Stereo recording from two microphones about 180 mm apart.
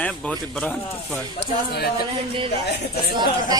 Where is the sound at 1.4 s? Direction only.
65° left (ahead or behind).